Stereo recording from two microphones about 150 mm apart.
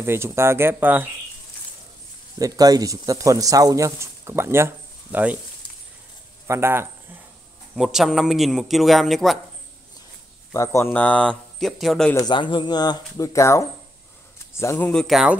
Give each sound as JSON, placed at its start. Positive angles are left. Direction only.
{"t": 0.0, "sound": "speech", "side_deg": -15}
{"t": 2.3, "sound": "speech", "side_deg": -25}
{"t": 6.4, "sound": "speech", "side_deg": -15}
{"t": 7.7, "sound": "a man's voice", "side_deg": 0}
{"t": 10.5, "sound": "speech", "side_deg": 20}
{"t": 12.2, "sound": "a man's voice", "side_deg": 30}
{"t": 14.9, "sound": "a man's voice", "side_deg": 0}